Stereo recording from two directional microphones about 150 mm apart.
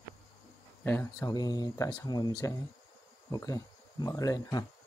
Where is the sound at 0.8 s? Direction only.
15° left (ahead or behind).